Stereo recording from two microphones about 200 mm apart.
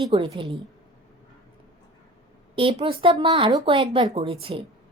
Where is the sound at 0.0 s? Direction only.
25° right (ahead or behind).